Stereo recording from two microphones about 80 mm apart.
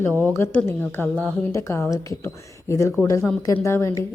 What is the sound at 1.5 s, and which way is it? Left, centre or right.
Speech, left.